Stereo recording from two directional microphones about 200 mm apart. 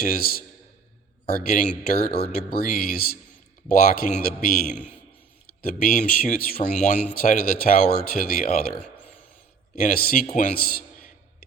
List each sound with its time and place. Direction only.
0.0 s speech: 45° left (ahead or behind)
9.7 s a man's voice: 45° left (ahead or behind)